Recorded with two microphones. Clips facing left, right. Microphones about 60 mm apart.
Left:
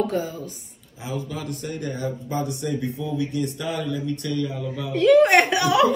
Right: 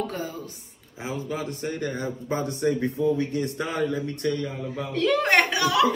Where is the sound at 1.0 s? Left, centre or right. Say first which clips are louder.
Even; right.